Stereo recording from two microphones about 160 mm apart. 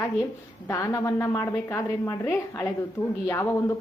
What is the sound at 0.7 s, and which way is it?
A woman's voice, 20° left (ahead or behind).